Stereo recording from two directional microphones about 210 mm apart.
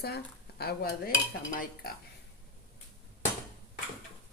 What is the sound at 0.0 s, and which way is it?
Dishes, 50° left (ahead or behind).